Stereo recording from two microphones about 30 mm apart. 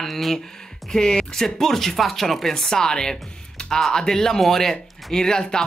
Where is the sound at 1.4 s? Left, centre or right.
Centre.